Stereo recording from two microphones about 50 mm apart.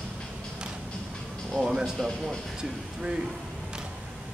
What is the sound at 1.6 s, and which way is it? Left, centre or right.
Speech, centre.